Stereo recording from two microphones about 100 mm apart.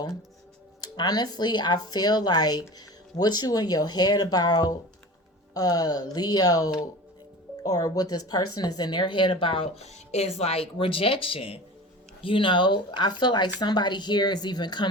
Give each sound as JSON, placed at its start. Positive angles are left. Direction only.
{"t": 0.8, "sound": "speech", "side_deg": 45}
{"t": 12.2, "sound": "speech", "side_deg": 60}